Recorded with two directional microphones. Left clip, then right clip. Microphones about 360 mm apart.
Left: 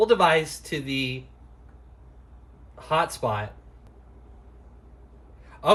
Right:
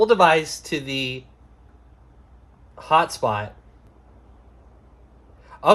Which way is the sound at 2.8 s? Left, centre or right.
Centre.